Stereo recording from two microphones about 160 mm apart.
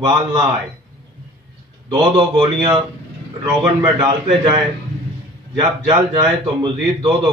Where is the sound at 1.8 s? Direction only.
30° right (ahead or behind).